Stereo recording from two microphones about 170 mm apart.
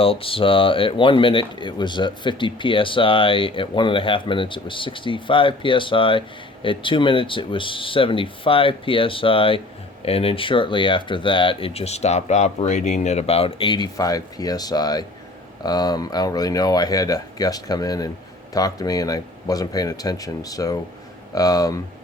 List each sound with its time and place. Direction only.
0.0 s speech: 35° left (ahead or behind)